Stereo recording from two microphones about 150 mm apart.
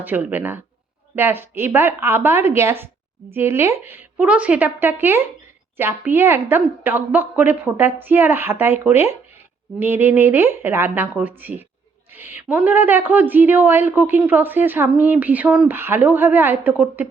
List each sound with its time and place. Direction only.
0.0 s a woman's voice: 10° right (ahead or behind)